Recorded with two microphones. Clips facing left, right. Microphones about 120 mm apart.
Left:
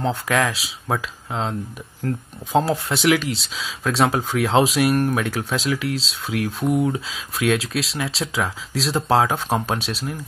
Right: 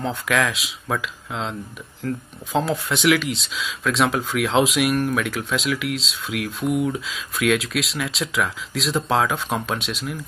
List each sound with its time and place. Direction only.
0.0 s speech: 35° left (ahead or behind)